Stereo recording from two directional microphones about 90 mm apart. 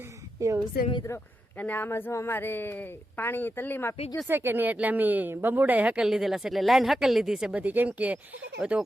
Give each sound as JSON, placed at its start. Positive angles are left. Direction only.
{"t": 0.3, "sound": "a woman's voice", "side_deg": -35}
{"t": 1.5, "sound": "a woman's voice", "side_deg": 20}
{"t": 4.3, "sound": "speech", "side_deg": -25}
{"t": 7.6, "sound": "speech", "side_deg": -20}